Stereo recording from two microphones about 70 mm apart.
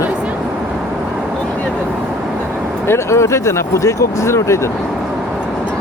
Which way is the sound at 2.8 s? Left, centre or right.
Left.